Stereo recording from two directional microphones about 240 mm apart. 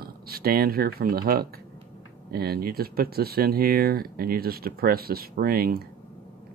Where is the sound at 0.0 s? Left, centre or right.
Right.